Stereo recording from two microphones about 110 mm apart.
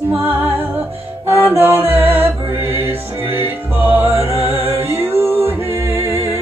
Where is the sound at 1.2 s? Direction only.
20° right (ahead or behind).